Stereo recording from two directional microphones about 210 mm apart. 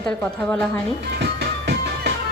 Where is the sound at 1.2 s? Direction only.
55° right (ahead or behind).